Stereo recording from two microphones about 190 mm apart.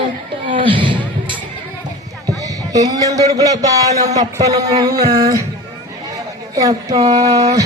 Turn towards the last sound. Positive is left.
turn(degrees=-20)  # may be behind; listen again after turning